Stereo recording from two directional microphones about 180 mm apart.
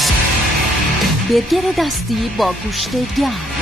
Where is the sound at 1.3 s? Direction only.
Centre (ahead or behind).